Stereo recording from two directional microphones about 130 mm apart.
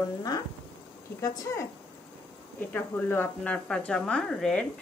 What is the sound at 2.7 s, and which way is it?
A woman's voice, 15° left (ahead or behind).